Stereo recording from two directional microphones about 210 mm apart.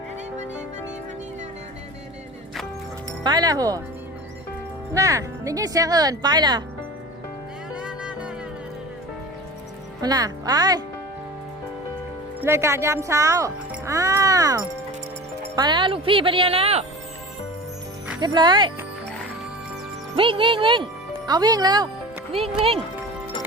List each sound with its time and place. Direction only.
3.1 s speech: 20° right (ahead or behind)
4.9 s speech: 15° right (ahead or behind)
7.7 s music: 5° right (ahead or behind)
10.0 s speech: 20° right (ahead or behind)
12.4 s speech: 10° right (ahead or behind); by 16.8 s 30° right (ahead or behind)
18.2 s speech: 20° right (ahead or behind)
20.1 s speech: 25° right (ahead or behind)